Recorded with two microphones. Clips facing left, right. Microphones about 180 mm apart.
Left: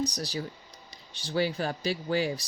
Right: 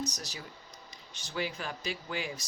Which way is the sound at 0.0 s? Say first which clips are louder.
Left 7 dB; 35° left (ahead or behind).